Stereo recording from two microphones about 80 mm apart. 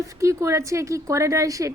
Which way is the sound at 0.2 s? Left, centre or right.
Right.